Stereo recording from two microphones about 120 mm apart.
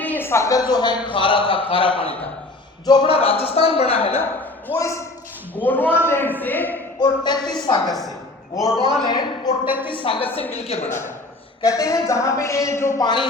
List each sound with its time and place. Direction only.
0.0 s a man's voice: 15° left (ahead or behind); by 2.1 s 50° left (ahead or behind)
2.8 s a man's voice: 35° left (ahead or behind)
3.1 s speech: 55° left (ahead or behind)
4.7 s a man's voice: 25° left (ahead or behind)
7.0 s a man's voice: 35° left (ahead or behind)
8.8 s a man's voice: 40° right (ahead or behind)
9.0 s a man's voice: 35° left (ahead or behind)
10.5 s speech: 65° left (ahead or behind)
11.6 s speech: 25° left (ahead or behind)
13.0 s a man's voice: 40° left (ahead or behind)